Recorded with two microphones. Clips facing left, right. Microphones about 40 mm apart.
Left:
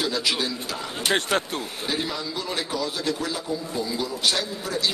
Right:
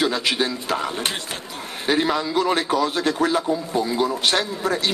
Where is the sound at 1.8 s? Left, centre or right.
Right.